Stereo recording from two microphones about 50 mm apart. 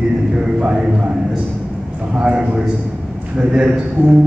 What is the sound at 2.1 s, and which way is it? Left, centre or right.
A man's voice, centre.